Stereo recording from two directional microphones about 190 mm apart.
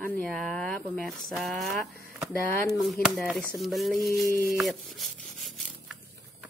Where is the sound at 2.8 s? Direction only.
Centre (ahead or behind).